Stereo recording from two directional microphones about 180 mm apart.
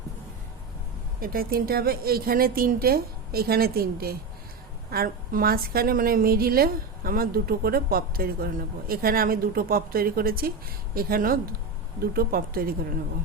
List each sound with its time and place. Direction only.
1.2 s a woman's voice: 55° right (ahead or behind)